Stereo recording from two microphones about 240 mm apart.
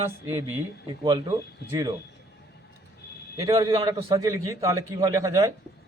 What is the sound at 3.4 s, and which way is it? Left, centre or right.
A man's voice, centre.